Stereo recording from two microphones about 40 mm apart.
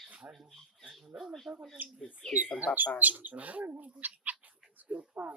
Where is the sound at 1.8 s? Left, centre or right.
Right.